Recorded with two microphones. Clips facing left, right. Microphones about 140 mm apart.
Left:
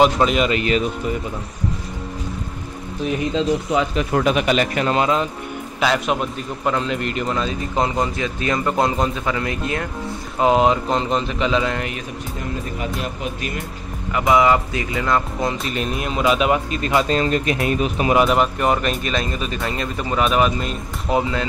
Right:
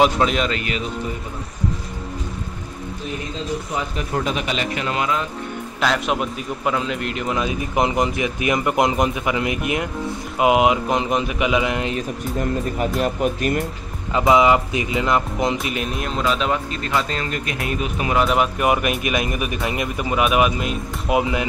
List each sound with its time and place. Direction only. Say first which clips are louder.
0.0 s speech: left 2 dB; centre (ahead or behind)
3.3 s speech: left 7 dB; 90° left; by 4.9 s 50° left (ahead or behind)
4.9 s speech: left 4 dB; 30° left (ahead or behind)
5.8 s a man's voice: left 1 dB; centre (ahead or behind); by 11.9 s 15° right (ahead or behind)
13.0 s speech: right 7 dB; 50° right (ahead or behind)
14.1 s speech: right 1 dB; 25° right (ahead or behind)
15.5 s speech: even; 5° right (ahead or behind); by 17.0 s 10° left (ahead or behind)
17.1 s speech: left 7 dB; 25° left (ahead or behind)
18.2 s a man's voice: left 1 dB; 5° right (ahead or behind)